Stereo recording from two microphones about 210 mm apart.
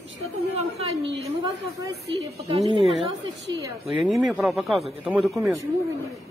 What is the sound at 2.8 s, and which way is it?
A woman's voice, centre (ahead or behind).